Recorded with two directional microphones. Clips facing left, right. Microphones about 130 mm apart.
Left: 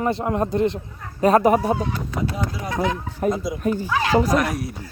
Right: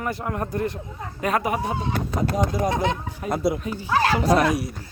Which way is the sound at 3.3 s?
60° right (ahead or behind).